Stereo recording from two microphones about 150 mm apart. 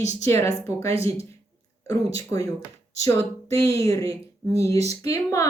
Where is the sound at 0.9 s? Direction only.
40° right (ahead or behind).